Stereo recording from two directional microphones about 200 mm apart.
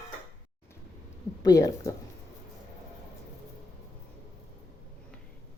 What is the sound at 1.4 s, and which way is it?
Speech, 15° left (ahead or behind).